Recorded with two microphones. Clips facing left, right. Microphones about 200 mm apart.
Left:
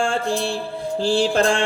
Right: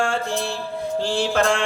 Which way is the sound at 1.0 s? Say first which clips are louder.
Left 3 dB; 35° left (ahead or behind).